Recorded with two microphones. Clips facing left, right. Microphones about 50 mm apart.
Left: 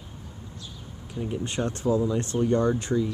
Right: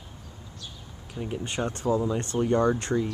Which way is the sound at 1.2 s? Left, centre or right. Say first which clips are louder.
Left 1 dB; centre.